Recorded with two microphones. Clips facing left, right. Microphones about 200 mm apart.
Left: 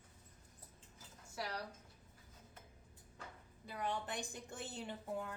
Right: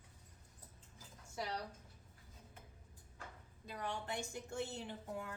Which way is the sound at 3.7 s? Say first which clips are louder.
Left 2 dB; 15° left (ahead or behind).